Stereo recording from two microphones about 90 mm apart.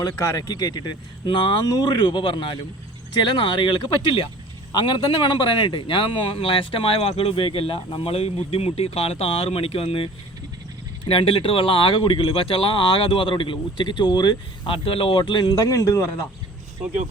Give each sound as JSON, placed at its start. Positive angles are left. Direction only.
{"t": 0.2, "sound": "speech", "side_deg": 40}
{"t": 1.6, "sound": "a man's voice", "side_deg": 45}
{"t": 11.0, "sound": "speech", "side_deg": 80}
{"t": 15.5, "sound": "a man's voice", "side_deg": 40}